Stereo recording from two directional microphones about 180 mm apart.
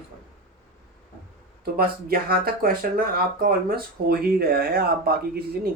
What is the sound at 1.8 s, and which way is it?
Speech, 55° right (ahead or behind).